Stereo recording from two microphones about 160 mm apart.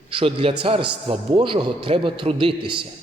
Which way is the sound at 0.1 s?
35° right (ahead or behind).